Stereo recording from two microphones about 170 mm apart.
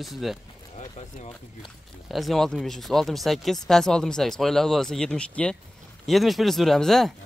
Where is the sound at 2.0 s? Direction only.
Centre (ahead or behind).